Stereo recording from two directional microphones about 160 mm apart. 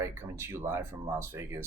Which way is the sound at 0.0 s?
15° right (ahead or behind).